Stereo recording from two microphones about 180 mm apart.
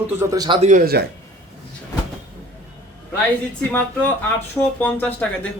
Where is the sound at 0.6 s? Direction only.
40° right (ahead or behind).